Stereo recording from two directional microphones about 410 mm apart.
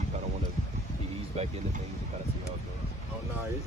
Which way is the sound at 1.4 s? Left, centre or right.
Centre.